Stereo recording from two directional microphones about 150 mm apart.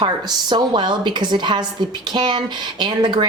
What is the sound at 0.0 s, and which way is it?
A woman's voice, 30° right (ahead or behind).